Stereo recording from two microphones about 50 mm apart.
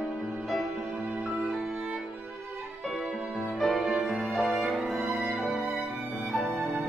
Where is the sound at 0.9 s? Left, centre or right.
Right.